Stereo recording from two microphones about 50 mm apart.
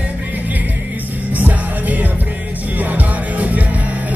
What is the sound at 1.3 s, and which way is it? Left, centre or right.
Music, right.